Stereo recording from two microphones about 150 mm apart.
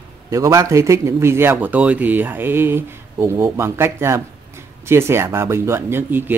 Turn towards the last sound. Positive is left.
turn(degrees=-15)  # may be behind; listen again after turning